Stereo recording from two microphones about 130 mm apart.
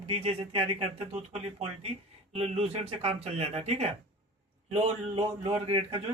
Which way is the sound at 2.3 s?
50° right (ahead or behind).